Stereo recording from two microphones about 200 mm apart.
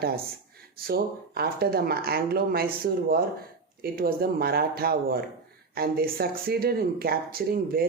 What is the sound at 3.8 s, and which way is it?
Speech, 50° right (ahead or behind).